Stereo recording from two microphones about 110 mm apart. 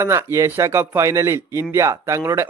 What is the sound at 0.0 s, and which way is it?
Speech, 25° right (ahead or behind).